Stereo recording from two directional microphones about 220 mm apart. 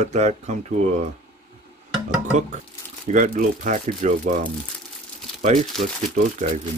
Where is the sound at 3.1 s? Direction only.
35° right (ahead or behind).